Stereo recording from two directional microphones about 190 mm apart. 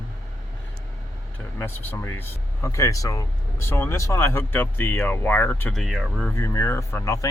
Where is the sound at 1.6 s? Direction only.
10° left (ahead or behind).